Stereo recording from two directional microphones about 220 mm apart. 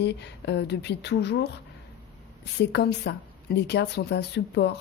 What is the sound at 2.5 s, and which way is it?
Speech, 50° left (ahead or behind).